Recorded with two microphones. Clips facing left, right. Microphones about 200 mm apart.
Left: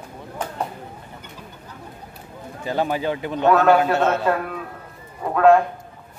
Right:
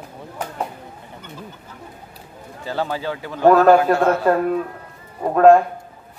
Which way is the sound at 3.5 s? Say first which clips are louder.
Right 4 dB; 40° right (ahead or behind).